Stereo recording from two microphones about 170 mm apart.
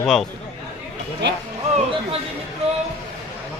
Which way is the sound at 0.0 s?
Centre (ahead or behind).